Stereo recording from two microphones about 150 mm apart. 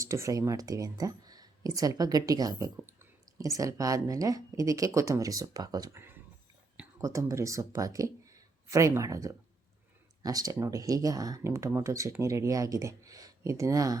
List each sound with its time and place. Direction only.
0.0 s speech: 20° right (ahead or behind)
2.7 s speech: 15° right (ahead or behind)
7.0 s speech: 20° right (ahead or behind)